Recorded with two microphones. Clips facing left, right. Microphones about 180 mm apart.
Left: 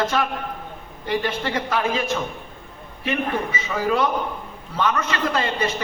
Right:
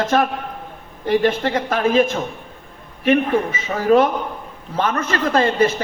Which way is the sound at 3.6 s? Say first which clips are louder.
Right 7 dB; 45° right (ahead or behind).